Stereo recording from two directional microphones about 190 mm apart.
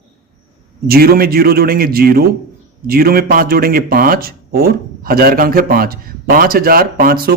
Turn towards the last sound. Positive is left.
turn(degrees=-50)  # may be behind; listen again after turning